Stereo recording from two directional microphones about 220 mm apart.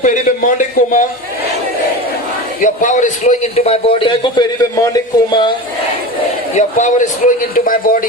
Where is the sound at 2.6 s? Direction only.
35° left (ahead or behind); by 4.9 s 20° left (ahead or behind).